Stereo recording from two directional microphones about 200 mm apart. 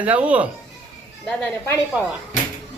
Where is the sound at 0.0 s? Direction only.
5° right (ahead or behind).